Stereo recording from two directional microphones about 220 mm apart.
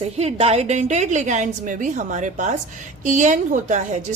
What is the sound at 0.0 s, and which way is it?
A woman's voice, 30° right (ahead or behind).